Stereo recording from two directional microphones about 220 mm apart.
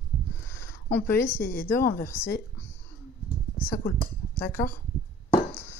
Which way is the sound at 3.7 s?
40° left (ahead or behind).